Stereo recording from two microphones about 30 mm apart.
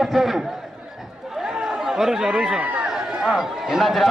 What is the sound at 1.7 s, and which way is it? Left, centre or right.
Speech, centre.